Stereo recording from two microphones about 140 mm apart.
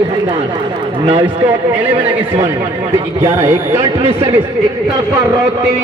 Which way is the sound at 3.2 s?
20° right (ahead or behind).